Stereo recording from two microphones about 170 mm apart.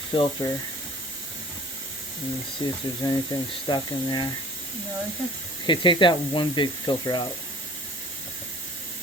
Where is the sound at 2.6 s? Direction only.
25° left (ahead or behind).